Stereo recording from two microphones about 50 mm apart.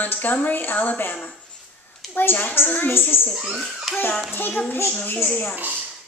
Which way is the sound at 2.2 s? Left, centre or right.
Left.